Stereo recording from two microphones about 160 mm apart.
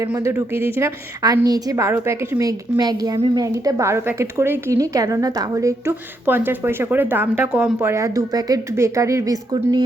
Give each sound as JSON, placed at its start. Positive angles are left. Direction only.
{"t": 0.0, "sound": "speech", "side_deg": -20}